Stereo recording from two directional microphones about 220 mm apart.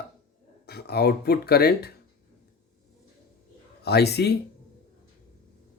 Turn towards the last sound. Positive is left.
turn(degrees=50)  # may be behind; listen again after turning